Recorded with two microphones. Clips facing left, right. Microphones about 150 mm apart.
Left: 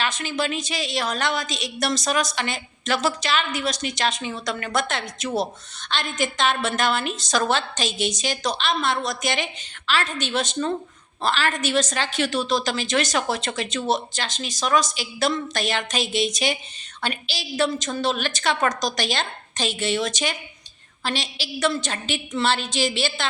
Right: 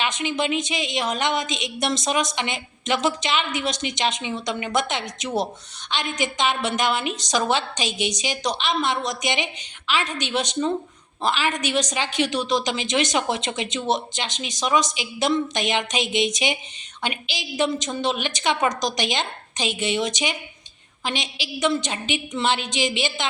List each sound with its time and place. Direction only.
0.0 s a woman's voice: 20° right (ahead or behind)